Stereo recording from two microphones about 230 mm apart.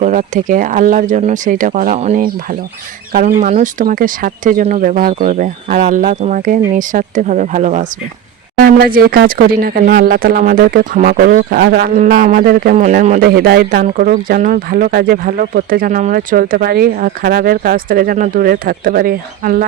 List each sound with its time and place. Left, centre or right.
0.0 s speech: right